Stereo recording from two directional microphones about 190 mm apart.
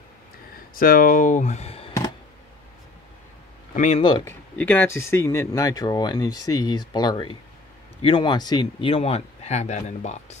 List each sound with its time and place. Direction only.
0.7 s speech: 45° left (ahead or behind)
3.7 s speech: 40° left (ahead or behind)
4.0 s speech: 25° left (ahead or behind)
4.3 s speech: 10° left (ahead or behind); by 10.1 s 35° left (ahead or behind)